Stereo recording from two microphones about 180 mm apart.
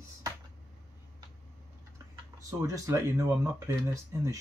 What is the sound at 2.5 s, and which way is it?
Speech, 15° right (ahead or behind).